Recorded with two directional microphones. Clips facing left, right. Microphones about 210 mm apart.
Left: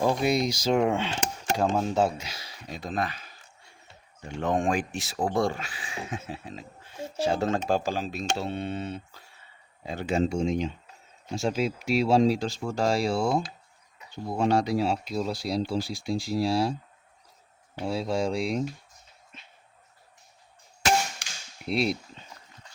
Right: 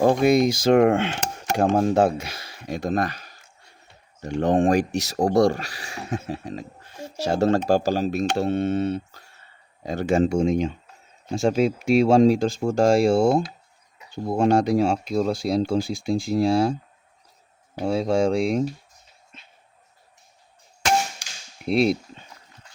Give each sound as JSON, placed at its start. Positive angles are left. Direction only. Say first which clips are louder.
{"t": 0.0, "sound": "speech", "louder": "right 7 dB", "side_deg": -50}
{"t": 4.4, "sound": "speech", "louder": "right 7 dB", "side_deg": -35}
{"t": 17.7, "sound": "speech", "louder": "right 7 dB", "side_deg": -45}
{"t": 21.2, "sound": "cap gun", "louder": "even", "side_deg": 60}
{"t": 21.7, "sound": "speech", "louder": "right 7 dB", "side_deg": -50}